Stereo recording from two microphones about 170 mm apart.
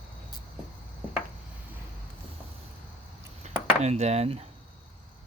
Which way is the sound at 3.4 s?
40° right (ahead or behind).